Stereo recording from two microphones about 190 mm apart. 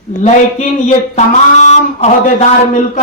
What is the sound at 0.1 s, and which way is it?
Speech, 40° left (ahead or behind).